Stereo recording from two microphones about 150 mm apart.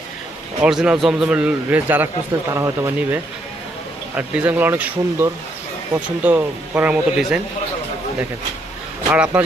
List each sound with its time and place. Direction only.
0.6 s a man's voice: 5° right (ahead or behind)
9.1 s a man's voice: 10° right (ahead or behind)